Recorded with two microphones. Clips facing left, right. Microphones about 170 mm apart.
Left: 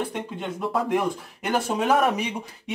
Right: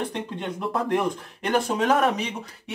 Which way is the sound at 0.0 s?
5° left (ahead or behind).